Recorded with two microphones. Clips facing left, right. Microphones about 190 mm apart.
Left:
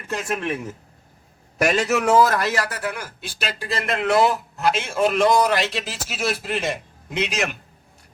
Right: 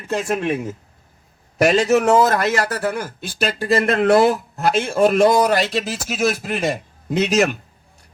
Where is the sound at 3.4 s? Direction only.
45° right (ahead or behind).